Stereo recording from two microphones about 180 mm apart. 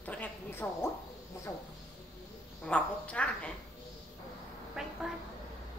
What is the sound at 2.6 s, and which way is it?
Speech, 5° left (ahead or behind).